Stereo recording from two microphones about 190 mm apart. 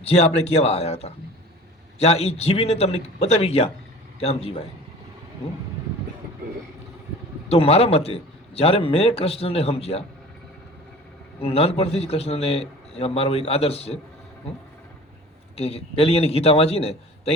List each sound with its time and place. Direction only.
0.0 s a man's voice: 35° left (ahead or behind)
7.4 s a man's voice: 30° left (ahead or behind)
11.4 s a man's voice: 30° left (ahead or behind)
15.5 s a man's voice: 30° left (ahead or behind)